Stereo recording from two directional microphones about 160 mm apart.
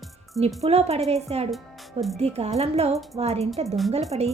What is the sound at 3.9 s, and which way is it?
Speech, 40° right (ahead or behind).